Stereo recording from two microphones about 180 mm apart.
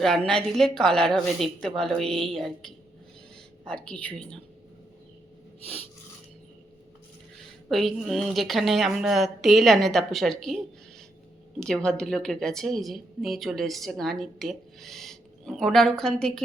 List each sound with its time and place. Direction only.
0.0 s a woman's voice: 5° left (ahead or behind)
7.7 s a woman's voice: centre (ahead or behind)
11.6 s a woman's voice: 5° left (ahead or behind)